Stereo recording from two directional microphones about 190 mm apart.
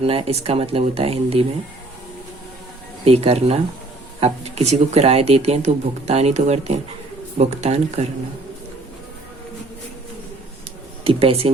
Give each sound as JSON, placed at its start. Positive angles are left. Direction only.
{"t": 0.0, "sound": "speech", "side_deg": -30}
{"t": 3.0, "sound": "speech", "side_deg": -30}
{"t": 11.0, "sound": "speech", "side_deg": -30}